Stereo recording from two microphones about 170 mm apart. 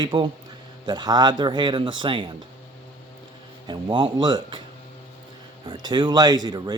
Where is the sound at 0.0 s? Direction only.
25° right (ahead or behind).